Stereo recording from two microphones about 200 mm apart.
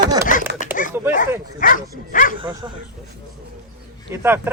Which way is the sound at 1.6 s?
40° left (ahead or behind).